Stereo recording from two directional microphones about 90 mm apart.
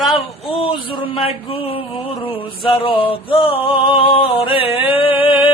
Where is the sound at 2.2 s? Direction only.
75° left (ahead or behind).